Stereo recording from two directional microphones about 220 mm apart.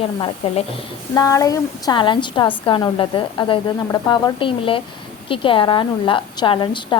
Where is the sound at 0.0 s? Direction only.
25° left (ahead or behind).